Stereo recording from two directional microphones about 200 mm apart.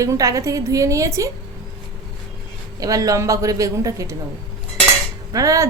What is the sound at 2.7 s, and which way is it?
A woman's voice, 15° right (ahead or behind).